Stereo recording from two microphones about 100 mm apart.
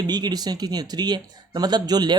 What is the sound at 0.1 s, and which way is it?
Speech, 45° right (ahead or behind).